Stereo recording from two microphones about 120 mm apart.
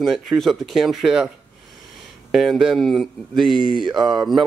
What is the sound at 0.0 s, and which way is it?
Speech, centre (ahead or behind).